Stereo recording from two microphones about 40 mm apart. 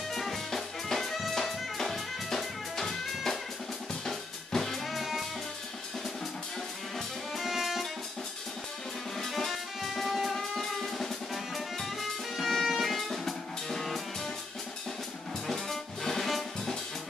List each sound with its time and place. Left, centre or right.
0.1 s music: centre
4.0 s drum kit: centre
7.3 s music: centre
9.2 s music: centre
13.1 s drum kit: centre
15.4 s music: centre